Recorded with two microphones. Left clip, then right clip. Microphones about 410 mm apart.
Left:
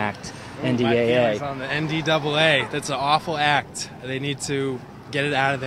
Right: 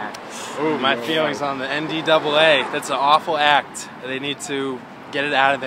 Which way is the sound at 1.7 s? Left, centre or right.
Left.